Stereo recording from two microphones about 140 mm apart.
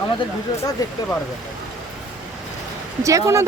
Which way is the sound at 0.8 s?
25° left (ahead or behind).